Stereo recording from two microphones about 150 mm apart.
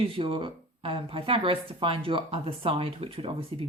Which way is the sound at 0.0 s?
35° right (ahead or behind).